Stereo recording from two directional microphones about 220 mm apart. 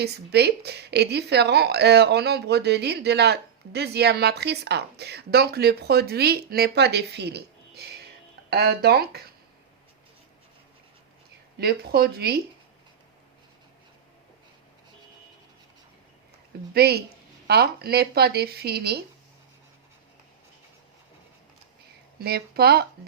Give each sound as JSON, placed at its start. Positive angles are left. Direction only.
{"t": 0.0, "sound": "a woman's voice", "side_deg": -50}
{"t": 11.5, "sound": "a woman's voice", "side_deg": -45}
{"t": 16.7, "sound": "a woman's voice", "side_deg": -45}
{"t": 22.2, "sound": "a woman's voice", "side_deg": -45}